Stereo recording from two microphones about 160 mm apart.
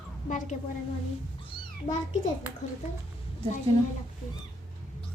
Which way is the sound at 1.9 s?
50° left (ahead or behind).